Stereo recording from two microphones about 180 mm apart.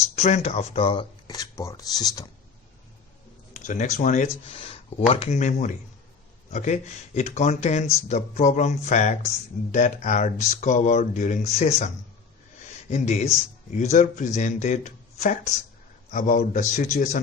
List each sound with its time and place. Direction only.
0.2 s speech: 35° left (ahead or behind); by 2.2 s 20° left (ahead or behind)
3.7 s speech: 40° left (ahead or behind)
4.5 s speech: 30° left (ahead or behind)
12.9 s speech: 35° left (ahead or behind)